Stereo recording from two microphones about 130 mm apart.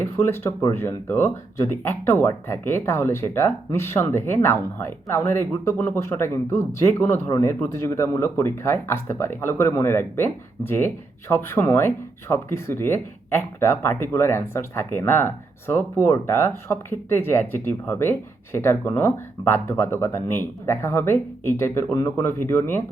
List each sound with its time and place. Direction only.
0.0 s speech: 20° left (ahead or behind)